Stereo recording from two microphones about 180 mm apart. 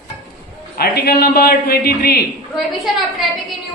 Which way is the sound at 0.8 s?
60° left (ahead or behind).